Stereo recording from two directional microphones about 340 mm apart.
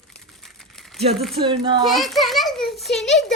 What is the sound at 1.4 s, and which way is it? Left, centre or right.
Speech, centre.